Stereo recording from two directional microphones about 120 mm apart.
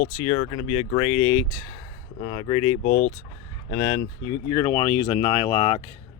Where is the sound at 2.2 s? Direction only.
45° left (ahead or behind).